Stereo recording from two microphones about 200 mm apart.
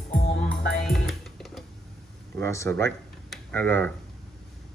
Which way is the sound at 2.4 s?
15° left (ahead or behind).